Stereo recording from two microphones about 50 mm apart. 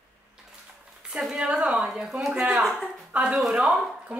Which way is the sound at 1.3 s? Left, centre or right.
Right.